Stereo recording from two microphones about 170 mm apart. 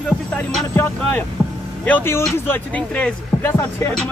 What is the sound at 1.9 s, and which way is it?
Speech, 15° left (ahead or behind).